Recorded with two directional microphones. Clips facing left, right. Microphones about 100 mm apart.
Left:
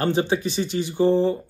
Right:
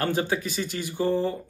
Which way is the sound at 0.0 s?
20° left (ahead or behind).